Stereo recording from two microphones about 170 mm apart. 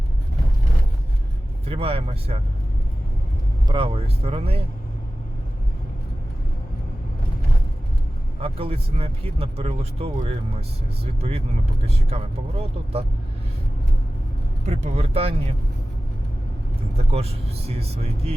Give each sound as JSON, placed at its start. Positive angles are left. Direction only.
{"t": 1.6, "sound": "speech", "side_deg": -35}
{"t": 3.7, "sound": "speech", "side_deg": -30}
{"t": 8.4, "sound": "speech", "side_deg": -35}
{"t": 14.7, "sound": "speech", "side_deg": -35}
{"t": 17.0, "sound": "speech", "side_deg": -35}